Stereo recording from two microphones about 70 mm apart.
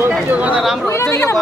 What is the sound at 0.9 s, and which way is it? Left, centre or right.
Speech, left.